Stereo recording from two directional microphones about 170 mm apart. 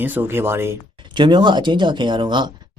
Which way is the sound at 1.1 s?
25° right (ahead or behind).